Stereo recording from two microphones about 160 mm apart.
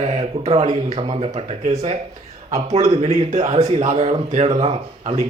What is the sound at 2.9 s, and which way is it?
Speech, 45° right (ahead or behind).